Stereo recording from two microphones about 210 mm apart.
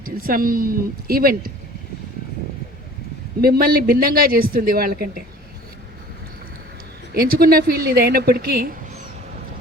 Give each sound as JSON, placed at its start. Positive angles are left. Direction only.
{"t": 0.3, "sound": "speech", "side_deg": -45}
{"t": 3.4, "sound": "speech", "side_deg": -45}
{"t": 7.1, "sound": "speech", "side_deg": -45}